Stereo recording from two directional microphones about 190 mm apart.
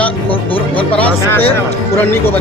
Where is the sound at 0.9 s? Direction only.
10° left (ahead or behind).